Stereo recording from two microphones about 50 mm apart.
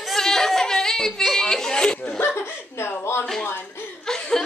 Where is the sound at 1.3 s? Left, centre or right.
Centre.